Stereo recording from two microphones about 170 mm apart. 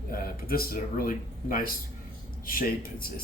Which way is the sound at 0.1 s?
60° left (ahead or behind).